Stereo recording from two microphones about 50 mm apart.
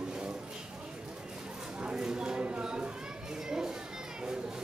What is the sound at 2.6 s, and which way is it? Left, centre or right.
Children playing, centre.